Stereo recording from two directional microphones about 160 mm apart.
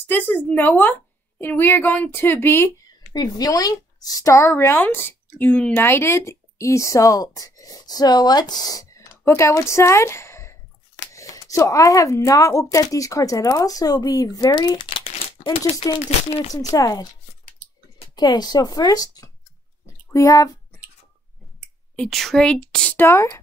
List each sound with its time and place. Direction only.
0.5 s a woman's voice: 10° left (ahead or behind); by 16.5 s 40° left (ahead or behind)
16.7 s speech: 25° left (ahead or behind)
21.9 s speech: centre (ahead or behind); by 23.4 s 20° left (ahead or behind)